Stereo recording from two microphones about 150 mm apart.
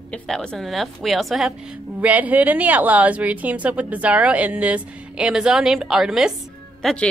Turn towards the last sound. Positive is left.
turn(degrees=5)  # may be behind; listen again after turning